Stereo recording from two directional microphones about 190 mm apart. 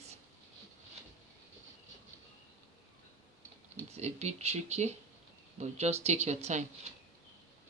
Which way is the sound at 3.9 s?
35° right (ahead or behind).